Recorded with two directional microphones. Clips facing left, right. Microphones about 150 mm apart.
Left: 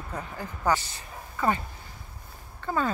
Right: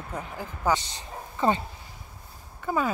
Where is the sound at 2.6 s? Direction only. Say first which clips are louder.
Right 1 dB; 10° right (ahead or behind).